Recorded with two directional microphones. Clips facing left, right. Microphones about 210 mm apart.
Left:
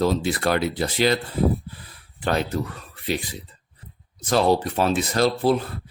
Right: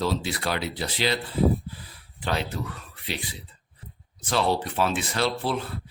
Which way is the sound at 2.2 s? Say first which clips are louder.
Left 5 dB; 45° left (ahead or behind).